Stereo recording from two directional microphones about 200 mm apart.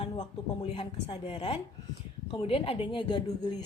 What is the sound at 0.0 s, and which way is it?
A woman's voice, 30° left (ahead or behind).